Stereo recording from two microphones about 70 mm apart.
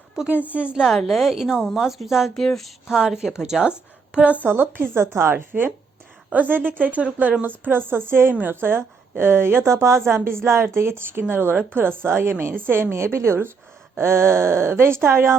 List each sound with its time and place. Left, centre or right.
0.5 s a woman's voice: centre
0.9 s a woman's voice: centre
4.4 s a woman's voice: right